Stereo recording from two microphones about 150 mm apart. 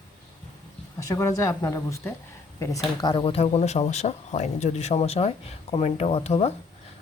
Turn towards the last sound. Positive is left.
turn(degrees=45)  # may be behind; listen again after turning